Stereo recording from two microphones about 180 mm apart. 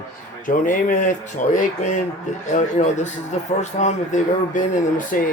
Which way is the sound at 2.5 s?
40° left (ahead or behind).